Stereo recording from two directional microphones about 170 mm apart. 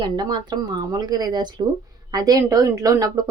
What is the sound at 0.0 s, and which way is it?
Speech, 25° right (ahead or behind).